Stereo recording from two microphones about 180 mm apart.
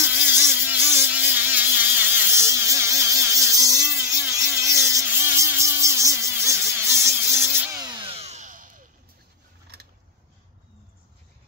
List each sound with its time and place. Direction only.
0.0 s mosquito: 10° right (ahead or behind); by 8.8 s 45° right (ahead or behind)